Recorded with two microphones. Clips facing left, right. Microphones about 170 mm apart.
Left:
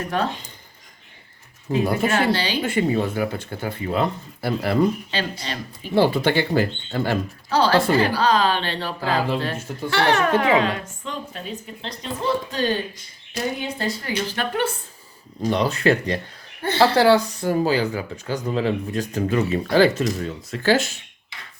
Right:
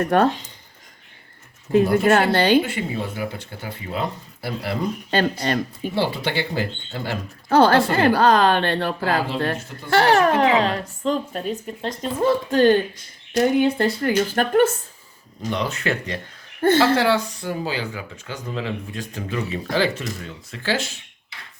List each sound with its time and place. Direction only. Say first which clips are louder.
0.0 s speech: right 6 dB; 55° right (ahead or behind)
1.7 s a child's voice: right 5 dB; 50° right (ahead or behind)
2.6 s speech: left 6 dB; 50° left (ahead or behind)
5.1 s a child's voice: right 7 dB; 50° right (ahead or behind)
5.9 s speech: left 6 dB; 50° left (ahead or behind)
7.5 s a child's voice: right 2 dB; 50° right (ahead or behind)
15.4 s speech: left 4 dB; 35° left (ahead or behind)
16.6 s speech: right 9 dB; 50° right (ahead or behind)
17.0 s speech: left 4 dB; 35° left (ahead or behind)